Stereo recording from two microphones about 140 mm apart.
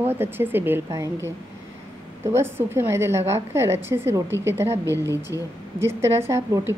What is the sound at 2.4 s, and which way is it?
A woman's voice, 15° right (ahead or behind).